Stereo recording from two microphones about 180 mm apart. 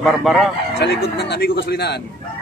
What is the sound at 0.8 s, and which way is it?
A man's voice, 70° left (ahead or behind).